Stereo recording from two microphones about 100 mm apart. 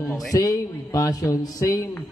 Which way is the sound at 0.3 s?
35° left (ahead or behind).